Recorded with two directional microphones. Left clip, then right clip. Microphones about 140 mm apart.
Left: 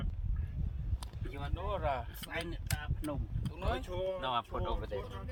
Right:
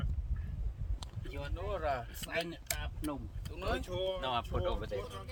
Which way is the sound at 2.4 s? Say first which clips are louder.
Right 1 dB; 10° right (ahead or behind).